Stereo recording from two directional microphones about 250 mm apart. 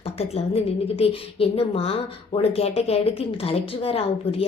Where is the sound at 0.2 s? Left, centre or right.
Left.